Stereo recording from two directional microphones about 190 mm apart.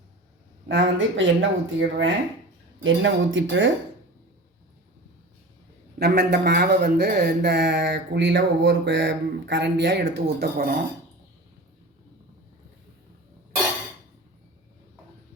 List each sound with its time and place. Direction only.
0.7 s speech: 80° right
6.0 s speech: 55° right (ahead or behind)